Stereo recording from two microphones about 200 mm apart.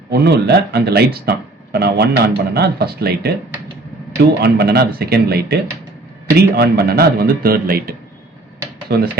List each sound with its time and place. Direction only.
0.1 s speech: 55° right (ahead or behind)